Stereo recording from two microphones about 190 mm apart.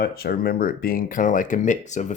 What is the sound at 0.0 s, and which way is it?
Speech, 55° left (ahead or behind).